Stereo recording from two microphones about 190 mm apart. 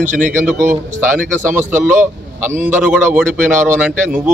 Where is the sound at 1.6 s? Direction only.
10° right (ahead or behind).